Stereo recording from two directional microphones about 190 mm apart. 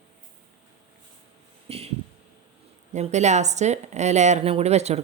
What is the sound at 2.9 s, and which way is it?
Speech, 35° right (ahead or behind).